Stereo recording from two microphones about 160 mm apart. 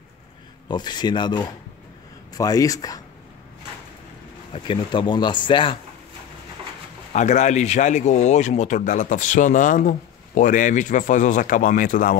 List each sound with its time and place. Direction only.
0.7 s speech: 25° left (ahead or behind)
4.5 s speech: 30° left (ahead or behind)
7.1 s speech: 50° left (ahead or behind)